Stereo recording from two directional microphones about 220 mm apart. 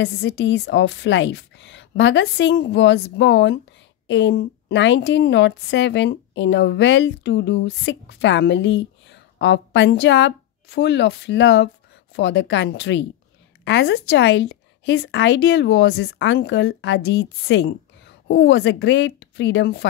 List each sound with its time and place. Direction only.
0.0 s a woman's voice: 55° left (ahead or behind)